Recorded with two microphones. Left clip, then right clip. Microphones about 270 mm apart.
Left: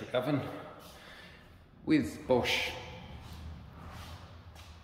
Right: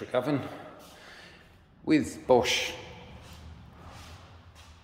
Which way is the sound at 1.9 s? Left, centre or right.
Centre.